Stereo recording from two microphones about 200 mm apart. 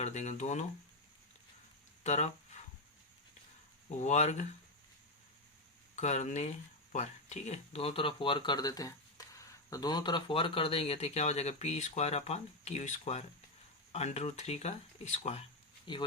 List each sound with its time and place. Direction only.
0.0 s speech: 35° left (ahead or behind)
2.0 s speech: 35° left (ahead or behind)
4.0 s speech: 35° left (ahead or behind)
6.0 s speech: 35° left (ahead or behind)